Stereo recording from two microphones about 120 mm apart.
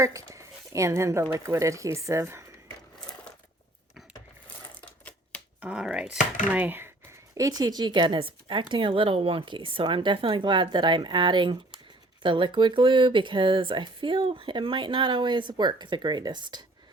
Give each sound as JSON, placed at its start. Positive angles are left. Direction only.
{"t": 0.0, "sound": "speech", "side_deg": -25}
{"t": 4.7, "sound": "a sound", "side_deg": 10}
{"t": 5.5, "sound": "speech", "side_deg": -10}
{"t": 7.3, "sound": "a woman's voice", "side_deg": -30}